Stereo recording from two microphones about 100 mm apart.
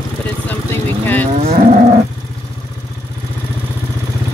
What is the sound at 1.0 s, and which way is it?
Speech, 20° left (ahead or behind).